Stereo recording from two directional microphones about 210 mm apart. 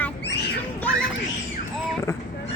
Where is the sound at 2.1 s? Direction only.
10° left (ahead or behind).